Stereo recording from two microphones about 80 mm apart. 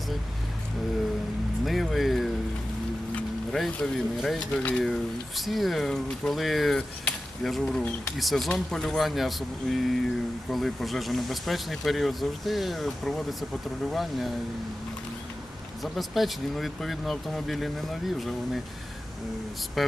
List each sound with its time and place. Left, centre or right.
1.6 s speech: centre
3.8 s speech: centre
15.8 s speech: centre